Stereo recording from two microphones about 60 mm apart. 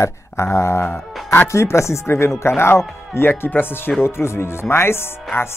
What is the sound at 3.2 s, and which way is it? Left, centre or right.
Speech, left.